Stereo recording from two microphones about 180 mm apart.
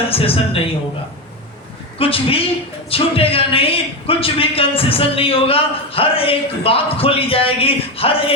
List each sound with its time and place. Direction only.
0.1 s a man's voice: 30° left (ahead or behind)
2.0 s a man's voice: 30° left (ahead or behind)